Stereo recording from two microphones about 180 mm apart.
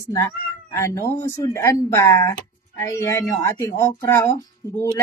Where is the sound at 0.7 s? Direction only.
15° left (ahead or behind).